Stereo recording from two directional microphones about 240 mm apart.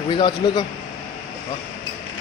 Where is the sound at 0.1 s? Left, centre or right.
Centre.